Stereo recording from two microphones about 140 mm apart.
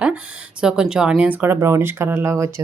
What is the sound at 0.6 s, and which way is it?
Speech, 5° right (ahead or behind).